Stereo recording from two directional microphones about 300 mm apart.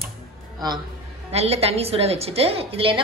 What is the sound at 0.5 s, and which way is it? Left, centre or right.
A man's voice, centre.